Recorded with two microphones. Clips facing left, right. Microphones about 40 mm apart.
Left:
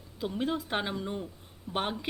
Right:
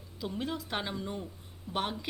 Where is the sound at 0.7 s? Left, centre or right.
Centre.